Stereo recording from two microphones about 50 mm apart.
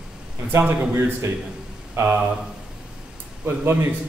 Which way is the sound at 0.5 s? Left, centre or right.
Right.